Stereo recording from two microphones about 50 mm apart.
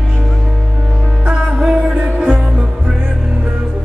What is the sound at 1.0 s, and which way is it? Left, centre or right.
Music, centre.